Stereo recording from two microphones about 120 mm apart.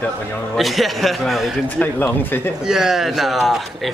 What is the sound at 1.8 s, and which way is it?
Speech, 15° left (ahead or behind).